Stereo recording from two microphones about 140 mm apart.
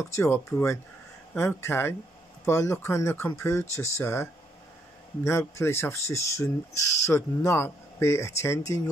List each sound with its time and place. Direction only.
0.0 s speech: 20° left (ahead or behind)